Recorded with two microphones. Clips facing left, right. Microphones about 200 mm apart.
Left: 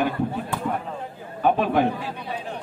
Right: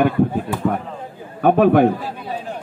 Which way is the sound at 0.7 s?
55° right (ahead or behind).